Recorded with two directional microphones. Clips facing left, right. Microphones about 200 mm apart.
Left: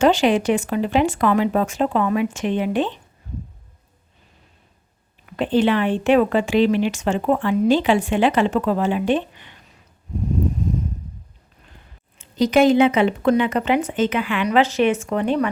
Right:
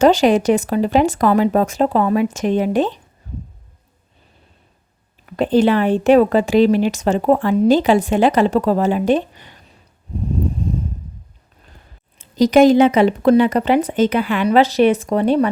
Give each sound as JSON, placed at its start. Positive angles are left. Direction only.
{"t": 0.0, "sound": "speech", "side_deg": -40}
{"t": 5.4, "sound": "speech", "side_deg": -40}
{"t": 12.2, "sound": "speech", "side_deg": -40}